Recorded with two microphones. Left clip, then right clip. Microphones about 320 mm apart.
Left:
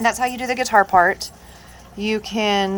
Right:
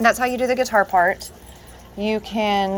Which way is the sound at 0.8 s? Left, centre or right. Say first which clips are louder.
Left 3 dB; left.